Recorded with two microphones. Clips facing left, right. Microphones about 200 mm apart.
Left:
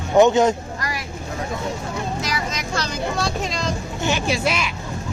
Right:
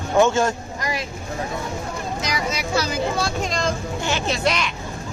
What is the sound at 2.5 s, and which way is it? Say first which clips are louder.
Speech: right 3 dB; 5° right (ahead or behind).